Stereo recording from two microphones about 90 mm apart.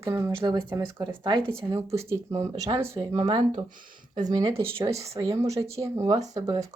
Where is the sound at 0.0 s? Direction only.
30° right (ahead or behind).